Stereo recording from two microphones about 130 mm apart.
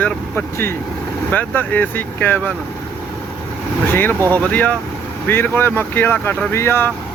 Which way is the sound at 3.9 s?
15° left (ahead or behind).